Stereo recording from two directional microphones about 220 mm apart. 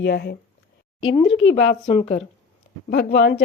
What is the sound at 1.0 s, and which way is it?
Speech, 25° left (ahead or behind).